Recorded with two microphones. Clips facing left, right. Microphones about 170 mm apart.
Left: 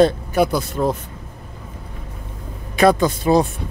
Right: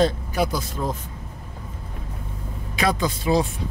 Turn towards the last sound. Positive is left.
turn(degrees=50)  # may be behind; listen again after turning